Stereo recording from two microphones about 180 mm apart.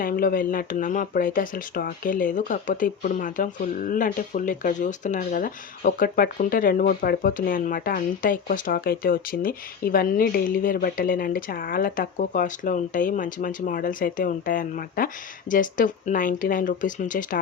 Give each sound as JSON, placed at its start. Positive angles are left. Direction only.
{"t": 0.0, "sound": "speech", "side_deg": 55}